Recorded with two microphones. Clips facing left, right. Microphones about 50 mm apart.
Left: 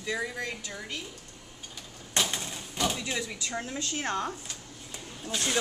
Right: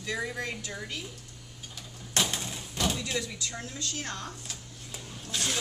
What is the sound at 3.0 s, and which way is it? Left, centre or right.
Speech, centre.